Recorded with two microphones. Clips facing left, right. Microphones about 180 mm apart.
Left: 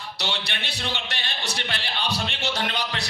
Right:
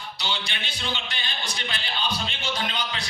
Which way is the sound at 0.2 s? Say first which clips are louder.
Left 1 dB; 70° left (ahead or behind).